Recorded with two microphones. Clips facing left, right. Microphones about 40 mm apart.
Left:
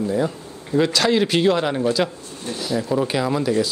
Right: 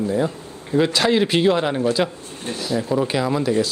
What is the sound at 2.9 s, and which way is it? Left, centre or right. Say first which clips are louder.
Speech: even; centre.